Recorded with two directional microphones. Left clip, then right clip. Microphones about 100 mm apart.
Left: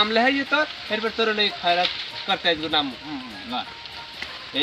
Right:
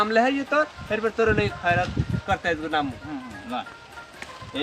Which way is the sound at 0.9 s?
15° right (ahead or behind).